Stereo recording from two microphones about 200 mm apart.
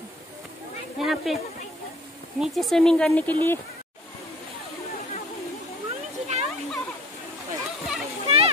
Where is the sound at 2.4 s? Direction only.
Centre (ahead or behind).